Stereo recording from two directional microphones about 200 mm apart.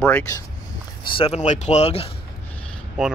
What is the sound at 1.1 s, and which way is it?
Speech, 30° left (ahead or behind).